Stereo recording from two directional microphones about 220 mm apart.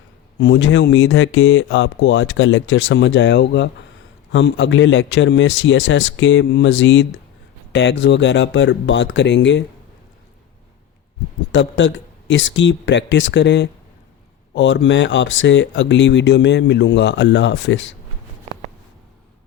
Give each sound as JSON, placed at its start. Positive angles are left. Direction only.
{"t": 0.3, "sound": "speech", "side_deg": 55}
{"t": 11.5, "sound": "speech", "side_deg": 55}